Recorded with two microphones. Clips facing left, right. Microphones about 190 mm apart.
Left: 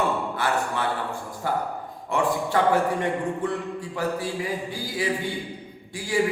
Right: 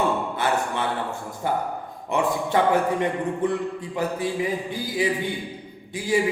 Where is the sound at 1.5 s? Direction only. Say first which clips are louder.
Right 2 dB; 20° right (ahead or behind).